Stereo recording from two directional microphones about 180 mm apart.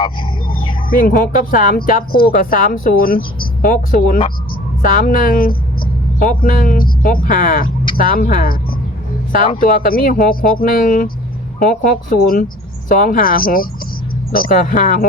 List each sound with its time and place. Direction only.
0.9 s speech: 55° left (ahead or behind)
9.6 s speech: 50° left (ahead or behind)